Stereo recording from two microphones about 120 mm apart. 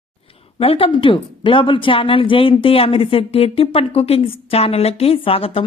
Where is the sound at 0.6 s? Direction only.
50° left (ahead or behind).